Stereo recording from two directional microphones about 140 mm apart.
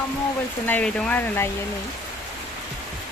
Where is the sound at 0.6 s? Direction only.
10° left (ahead or behind).